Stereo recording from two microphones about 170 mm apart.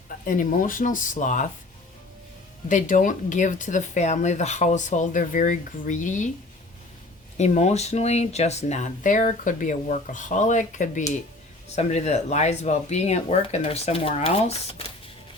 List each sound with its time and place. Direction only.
0.3 s speech: 50° left (ahead or behind)
2.6 s speech: 50° left (ahead or behind)
7.3 s speech: 40° left (ahead or behind)